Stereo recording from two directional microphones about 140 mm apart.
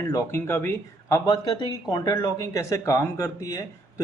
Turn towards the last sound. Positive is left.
turn(degrees=20)  # may be behind; listen again after turning